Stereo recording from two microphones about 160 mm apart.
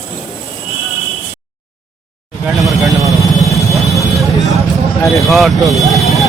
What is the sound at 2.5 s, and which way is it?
Vehicle, centre (ahead or behind).